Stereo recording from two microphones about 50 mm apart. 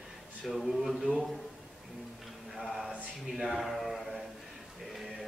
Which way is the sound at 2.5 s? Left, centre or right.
Centre.